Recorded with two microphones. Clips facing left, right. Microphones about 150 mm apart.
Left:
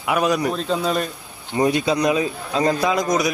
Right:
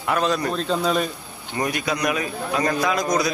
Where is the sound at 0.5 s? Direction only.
Centre (ahead or behind).